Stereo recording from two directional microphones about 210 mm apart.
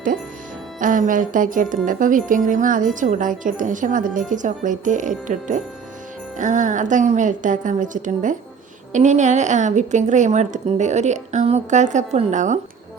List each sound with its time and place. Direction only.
0.8 s speech: 40° right (ahead or behind)